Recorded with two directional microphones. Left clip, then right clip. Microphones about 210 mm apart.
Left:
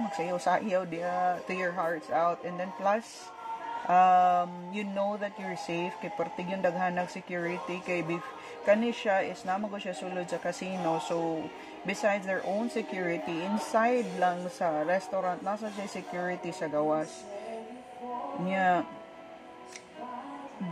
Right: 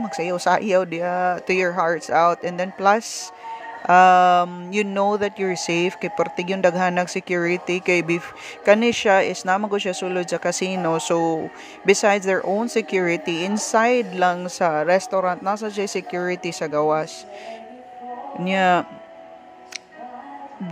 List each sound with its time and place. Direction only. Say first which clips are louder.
0.1 s speech: right 10 dB; 30° right (ahead or behind)
18.4 s speech: right 9 dB; 35° right (ahead or behind)